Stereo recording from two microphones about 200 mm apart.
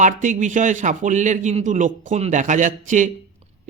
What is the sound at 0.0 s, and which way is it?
A man's voice, 40° right (ahead or behind).